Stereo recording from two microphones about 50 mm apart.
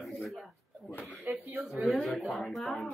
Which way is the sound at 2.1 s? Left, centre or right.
Centre.